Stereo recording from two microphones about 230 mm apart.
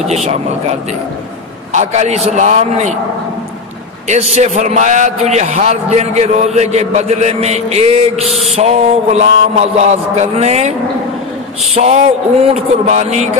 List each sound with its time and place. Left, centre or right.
1.7 s a man's voice: right
4.1 s a man's voice: right
11.7 s a man's voice: right